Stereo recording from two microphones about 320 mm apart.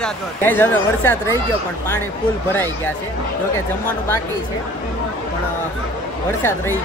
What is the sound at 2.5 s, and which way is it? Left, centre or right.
Speech, centre.